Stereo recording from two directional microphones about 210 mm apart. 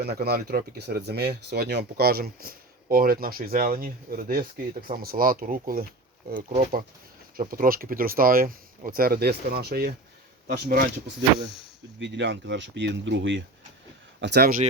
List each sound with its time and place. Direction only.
0.0 s speech: 50° right (ahead or behind)
11.9 s speech: 55° right (ahead or behind)